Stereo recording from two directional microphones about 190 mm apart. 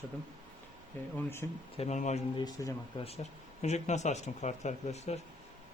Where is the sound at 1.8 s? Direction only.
40° left (ahead or behind).